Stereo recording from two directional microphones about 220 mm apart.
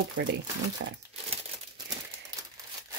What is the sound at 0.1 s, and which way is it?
Speech, 55° right (ahead or behind).